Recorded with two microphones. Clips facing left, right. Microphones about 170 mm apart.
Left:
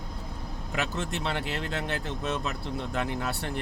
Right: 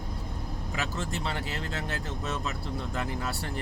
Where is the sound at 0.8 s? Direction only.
65° left (ahead or behind).